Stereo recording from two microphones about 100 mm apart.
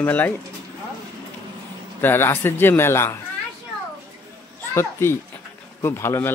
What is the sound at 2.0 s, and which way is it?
Speech, 25° left (ahead or behind).